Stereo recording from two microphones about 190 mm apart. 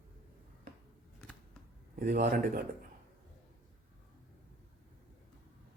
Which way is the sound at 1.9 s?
55° right (ahead or behind).